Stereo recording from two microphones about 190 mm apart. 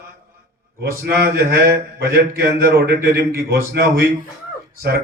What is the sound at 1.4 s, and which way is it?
Speech, 55° right (ahead or behind).